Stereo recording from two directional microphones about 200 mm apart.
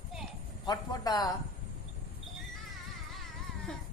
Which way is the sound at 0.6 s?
20° left (ahead or behind).